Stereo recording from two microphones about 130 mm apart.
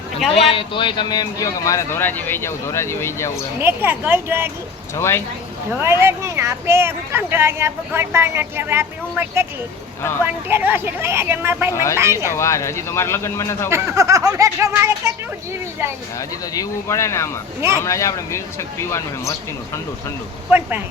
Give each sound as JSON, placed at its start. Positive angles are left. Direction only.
{"t": 0.3, "sound": "speech", "side_deg": 45}
{"t": 3.6, "sound": "a woman's voice", "side_deg": -20}
{"t": 4.9, "sound": "speech", "side_deg": 20}
{"t": 5.8, "sound": "a woman's voice", "side_deg": -20}
{"t": 11.7, "sound": "speech", "side_deg": 25}
{"t": 13.7, "sound": "speech", "side_deg": -20}
{"t": 16.1, "sound": "speech", "side_deg": 25}
{"t": 20.5, "sound": "a woman's voice", "side_deg": -15}